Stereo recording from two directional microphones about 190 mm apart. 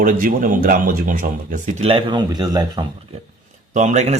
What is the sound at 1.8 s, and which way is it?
Speech, 25° right (ahead or behind).